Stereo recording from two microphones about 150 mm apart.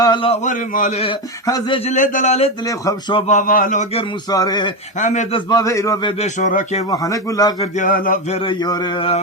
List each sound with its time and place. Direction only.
0.0 s a man's voice: 30° left (ahead or behind)
0.4 s speech: 60° left (ahead or behind)
1.5 s speech: 30° left (ahead or behind)
1.9 s a man's voice: 55° left (ahead or behind)
2.6 s a man's voice: 25° left (ahead or behind)
3.2 s speech: 60° left (ahead or behind)
4.3 s a man's voice: 25° left (ahead or behind)
4.9 s a man's voice: 55° left (ahead or behind)
5.3 s a man's voice: 25° left (ahead or behind)
6.0 s speech: 35° left (ahead or behind)
6.2 s a man's voice: 55° left (ahead or behind)
6.9 s a man's voice: 25° left (ahead or behind)
7.6 s speech: 60° left (ahead or behind)
8.3 s speech: 35° left (ahead or behind)